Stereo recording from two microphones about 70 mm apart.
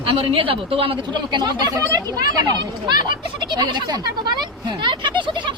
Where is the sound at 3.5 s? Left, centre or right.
Right.